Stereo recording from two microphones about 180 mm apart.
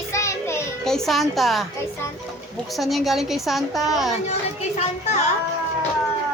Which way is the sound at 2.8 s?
Centre (ahead or behind).